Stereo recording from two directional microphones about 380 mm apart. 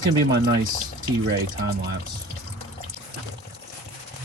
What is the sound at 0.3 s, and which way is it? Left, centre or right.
Speech, right.